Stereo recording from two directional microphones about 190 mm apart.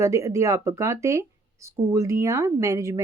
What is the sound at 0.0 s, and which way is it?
Speech, 15° right (ahead or behind).